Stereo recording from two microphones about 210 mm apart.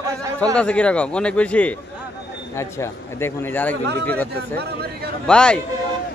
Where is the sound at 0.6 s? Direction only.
5° left (ahead or behind).